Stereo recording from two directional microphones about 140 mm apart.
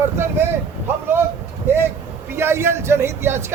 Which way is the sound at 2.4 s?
15° right (ahead or behind).